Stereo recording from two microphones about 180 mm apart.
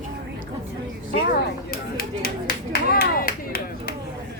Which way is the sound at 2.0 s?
55° left (ahead or behind).